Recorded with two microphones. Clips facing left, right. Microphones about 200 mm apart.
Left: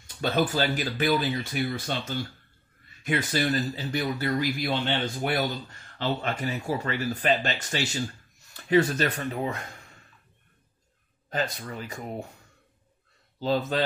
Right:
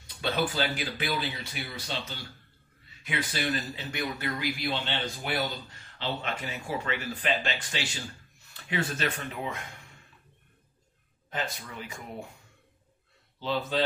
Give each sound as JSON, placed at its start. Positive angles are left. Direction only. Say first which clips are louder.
{"t": 0.0, "sound": "speech", "louder": "left 4 dB", "side_deg": 45}
{"t": 11.2, "sound": "speech", "louder": "left 5 dB", "side_deg": 40}
{"t": 13.4, "sound": "speech", "louder": "left 5 dB", "side_deg": 40}